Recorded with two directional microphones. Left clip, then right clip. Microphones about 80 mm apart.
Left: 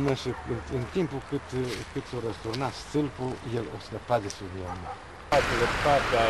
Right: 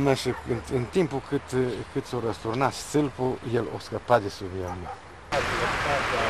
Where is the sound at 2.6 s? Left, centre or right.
Right.